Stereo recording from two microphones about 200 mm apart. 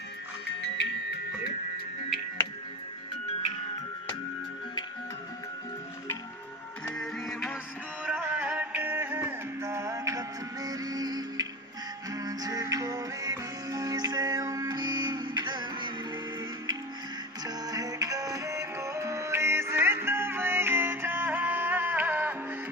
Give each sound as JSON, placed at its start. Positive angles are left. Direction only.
{"t": 0.6, "sound": "music", "side_deg": 60}
{"t": 7.0, "sound": "music", "side_deg": 5}
{"t": 17.6, "sound": "music", "side_deg": -20}